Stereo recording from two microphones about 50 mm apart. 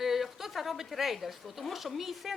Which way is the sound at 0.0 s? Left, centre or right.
Centre.